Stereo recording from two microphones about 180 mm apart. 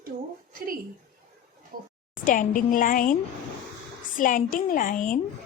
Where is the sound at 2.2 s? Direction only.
50° left (ahead or behind).